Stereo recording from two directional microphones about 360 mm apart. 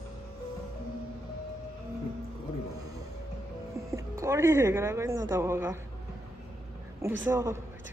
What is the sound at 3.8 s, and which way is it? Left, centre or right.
Speech, centre.